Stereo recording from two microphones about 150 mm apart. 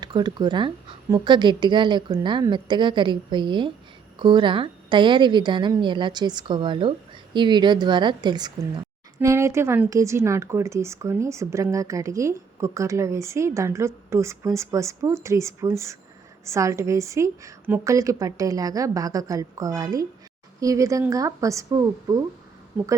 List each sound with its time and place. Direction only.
0.0 s a woman's voice: 30° right (ahead or behind)